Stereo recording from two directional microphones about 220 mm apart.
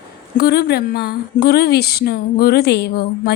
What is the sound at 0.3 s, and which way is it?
A woman's voice, 45° left (ahead or behind).